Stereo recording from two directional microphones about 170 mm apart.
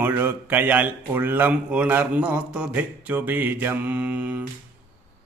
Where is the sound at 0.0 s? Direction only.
10° right (ahead or behind).